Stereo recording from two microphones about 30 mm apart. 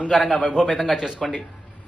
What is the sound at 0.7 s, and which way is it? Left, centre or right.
Speech, centre.